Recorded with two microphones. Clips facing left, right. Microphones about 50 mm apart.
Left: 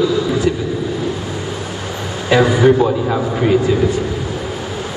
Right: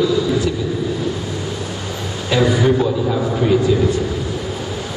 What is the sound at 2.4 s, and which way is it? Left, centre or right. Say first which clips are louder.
A man's voice: left 4 dB; left.